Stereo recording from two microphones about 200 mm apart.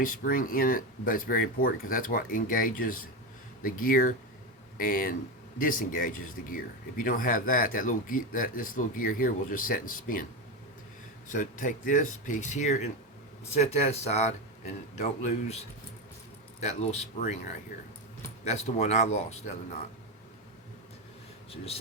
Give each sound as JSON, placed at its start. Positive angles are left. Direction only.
{"t": 0.0, "sound": "speech", "side_deg": 45}
{"t": 11.3, "sound": "speech", "side_deg": 40}
{"t": 16.6, "sound": "speech", "side_deg": 35}
{"t": 18.4, "sound": "speech", "side_deg": 35}
{"t": 21.5, "sound": "speech", "side_deg": 30}